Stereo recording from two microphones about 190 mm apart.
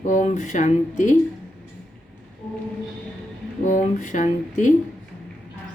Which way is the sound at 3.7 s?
40° left (ahead or behind).